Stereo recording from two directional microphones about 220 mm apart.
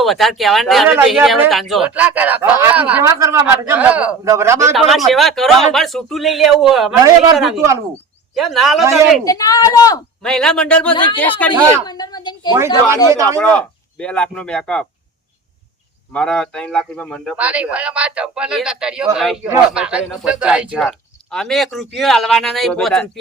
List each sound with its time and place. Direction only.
0.0 s speech: centre (ahead or behind)
4.7 s speech: centre (ahead or behind)
9.2 s speech: 15° left (ahead or behind)
10.2 s speech: 5° left (ahead or behind)
10.9 s speech: 20° left (ahead or behind)
11.2 s speech: 5° left (ahead or behind)
11.9 s a sound: 15° left (ahead or behind)
12.5 s speech: 10° right (ahead or behind)
13.4 s speech: 5° left (ahead or behind)
16.1 s speech: 5° left (ahead or behind)